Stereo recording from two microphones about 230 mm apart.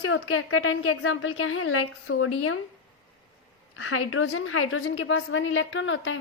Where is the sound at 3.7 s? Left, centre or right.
Left.